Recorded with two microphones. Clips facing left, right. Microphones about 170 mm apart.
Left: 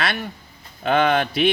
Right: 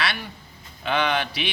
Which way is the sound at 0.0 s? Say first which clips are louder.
Left 3 dB; 50° left (ahead or behind).